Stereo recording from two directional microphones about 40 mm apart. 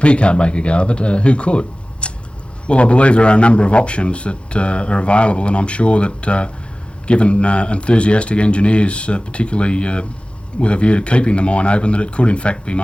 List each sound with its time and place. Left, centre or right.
0.0 s speech: left